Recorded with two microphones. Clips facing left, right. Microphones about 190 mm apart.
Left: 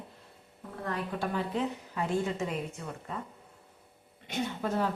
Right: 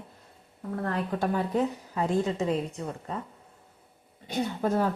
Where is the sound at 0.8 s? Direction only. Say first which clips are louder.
Right 4 dB; 45° right (ahead or behind).